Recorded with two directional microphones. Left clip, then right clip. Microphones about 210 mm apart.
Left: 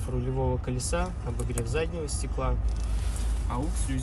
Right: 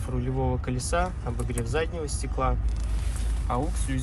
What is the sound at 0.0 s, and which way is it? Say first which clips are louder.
Speech: right 1 dB; 10° left (ahead or behind).